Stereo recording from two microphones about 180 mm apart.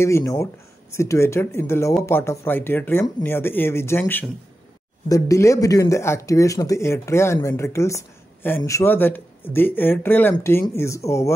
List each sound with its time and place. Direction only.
0.0 s a woman's voice: 15° left (ahead or behind)